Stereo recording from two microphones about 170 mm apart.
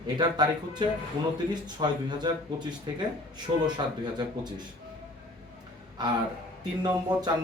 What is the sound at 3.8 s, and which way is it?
Speech, 25° right (ahead or behind).